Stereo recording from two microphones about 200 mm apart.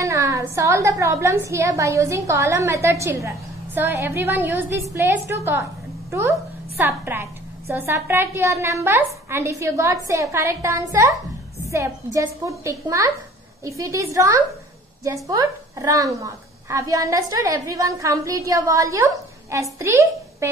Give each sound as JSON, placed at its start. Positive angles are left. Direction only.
{"t": 0.0, "sound": "a woman's voice", "side_deg": -15}